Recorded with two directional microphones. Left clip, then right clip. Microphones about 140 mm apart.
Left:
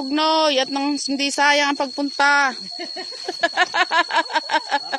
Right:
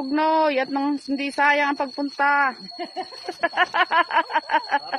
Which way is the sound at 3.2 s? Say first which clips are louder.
Left 2 dB; 60° left (ahead or behind).